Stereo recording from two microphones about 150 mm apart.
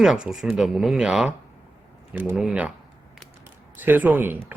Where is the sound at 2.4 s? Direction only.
5° right (ahead or behind).